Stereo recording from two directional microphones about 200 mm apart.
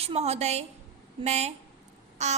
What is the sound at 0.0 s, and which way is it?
A woman's voice, 30° right (ahead or behind).